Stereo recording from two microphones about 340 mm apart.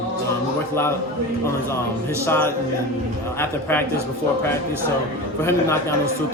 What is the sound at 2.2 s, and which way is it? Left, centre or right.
Speech, centre.